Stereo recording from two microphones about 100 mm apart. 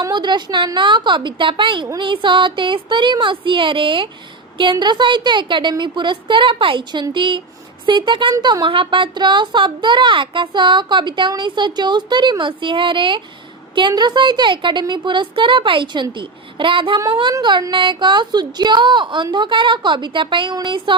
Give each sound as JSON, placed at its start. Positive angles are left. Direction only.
{"t": 0.0, "sound": "speech", "side_deg": -45}